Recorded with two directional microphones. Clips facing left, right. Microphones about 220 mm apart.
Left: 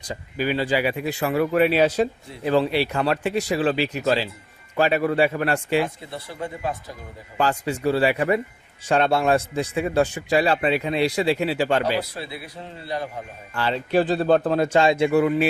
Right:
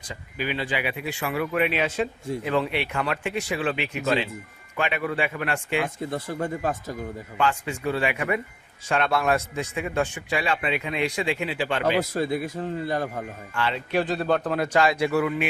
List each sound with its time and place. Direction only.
0.1 s a man's voice: 40° left (ahead or behind)
6.0 s a man's voice: 45° right (ahead or behind)
7.3 s a man's voice: 35° left (ahead or behind)
11.9 s a man's voice: 45° right (ahead or behind)
13.6 s a man's voice: 35° left (ahead or behind)